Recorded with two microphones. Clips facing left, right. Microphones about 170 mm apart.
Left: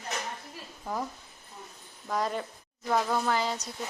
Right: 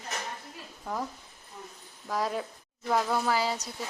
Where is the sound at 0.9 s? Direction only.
5° left (ahead or behind).